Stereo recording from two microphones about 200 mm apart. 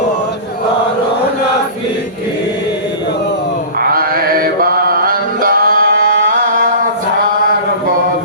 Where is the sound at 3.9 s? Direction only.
45° right (ahead or behind).